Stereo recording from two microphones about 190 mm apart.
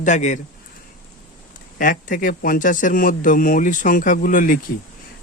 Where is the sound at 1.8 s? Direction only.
45° left (ahead or behind).